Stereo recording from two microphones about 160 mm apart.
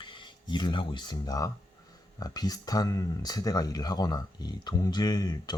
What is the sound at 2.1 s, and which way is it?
Speech, 25° left (ahead or behind).